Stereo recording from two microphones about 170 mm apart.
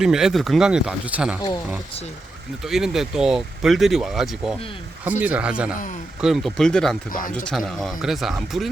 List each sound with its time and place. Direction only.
0.0 s speech: 5° right (ahead or behind)
2.6 s a man's voice: centre (ahead or behind)
7.1 s speech: 55° left (ahead or behind)
7.4 s speech: centre (ahead or behind)